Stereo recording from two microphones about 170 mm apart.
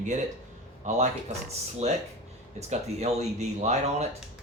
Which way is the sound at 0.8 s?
45° right (ahead or behind).